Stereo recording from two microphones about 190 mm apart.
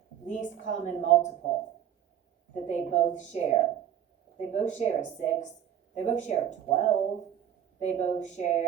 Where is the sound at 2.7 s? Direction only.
40° left (ahead or behind).